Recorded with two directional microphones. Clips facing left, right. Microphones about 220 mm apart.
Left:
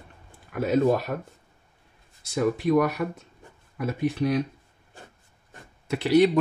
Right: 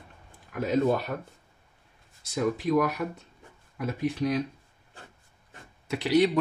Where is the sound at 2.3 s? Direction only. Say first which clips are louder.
Left 3 dB; 55° left (ahead or behind).